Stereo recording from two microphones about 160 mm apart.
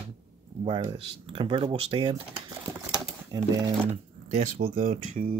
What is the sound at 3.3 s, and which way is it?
Speech, 25° right (ahead or behind).